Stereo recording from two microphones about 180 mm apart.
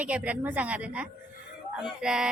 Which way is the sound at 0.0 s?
5° right (ahead or behind).